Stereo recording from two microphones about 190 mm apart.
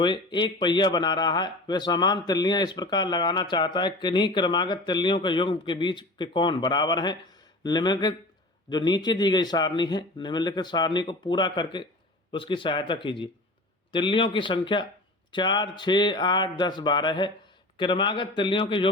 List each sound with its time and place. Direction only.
0.0 s speech: 25° left (ahead or behind)